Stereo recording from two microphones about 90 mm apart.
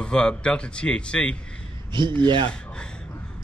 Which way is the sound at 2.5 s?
10° left (ahead or behind).